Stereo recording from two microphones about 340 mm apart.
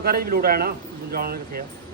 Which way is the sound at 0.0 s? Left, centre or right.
Right.